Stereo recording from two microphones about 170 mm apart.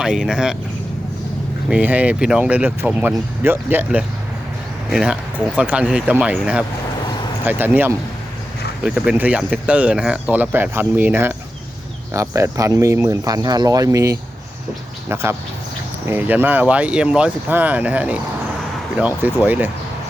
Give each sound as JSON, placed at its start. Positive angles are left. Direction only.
{"t": 0.0, "sound": "speech", "side_deg": -5}
{"t": 1.7, "sound": "speech", "side_deg": -10}